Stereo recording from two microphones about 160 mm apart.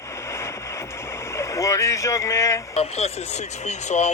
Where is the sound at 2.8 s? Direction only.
40° left (ahead or behind).